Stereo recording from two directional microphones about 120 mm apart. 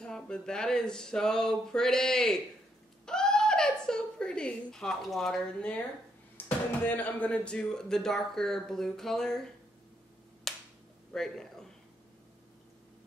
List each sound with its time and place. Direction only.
0.0 s speech: 5° left (ahead or behind)
3.1 s a sound: 5° left (ahead or behind)
6.3 s speech: 15° left (ahead or behind)
10.5 s finger snapping: centre (ahead or behind)
11.1 s a man's voice: 5° left (ahead or behind)